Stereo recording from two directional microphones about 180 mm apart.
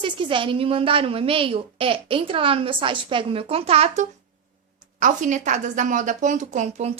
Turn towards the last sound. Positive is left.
turn(degrees=-40)  # may be behind; listen again after turning